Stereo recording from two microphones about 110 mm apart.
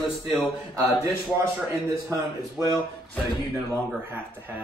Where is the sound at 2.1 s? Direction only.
30° right (ahead or behind).